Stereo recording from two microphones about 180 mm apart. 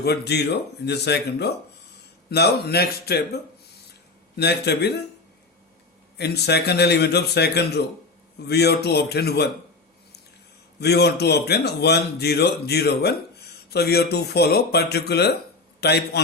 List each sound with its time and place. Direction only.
0.0 s a man's voice: 65° left (ahead or behind)
6.1 s a man's voice: 65° left (ahead or behind)
10.8 s a man's voice: 65° left (ahead or behind)